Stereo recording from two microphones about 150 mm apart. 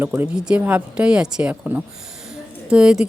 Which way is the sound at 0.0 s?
15° right (ahead or behind).